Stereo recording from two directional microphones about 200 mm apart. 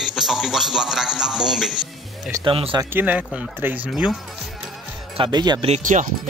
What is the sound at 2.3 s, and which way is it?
Speech, 25° right (ahead or behind).